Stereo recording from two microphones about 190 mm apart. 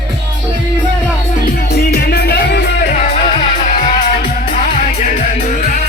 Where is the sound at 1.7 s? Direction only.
60° left (ahead or behind).